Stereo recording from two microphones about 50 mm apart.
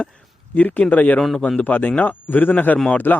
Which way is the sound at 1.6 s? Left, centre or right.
Left.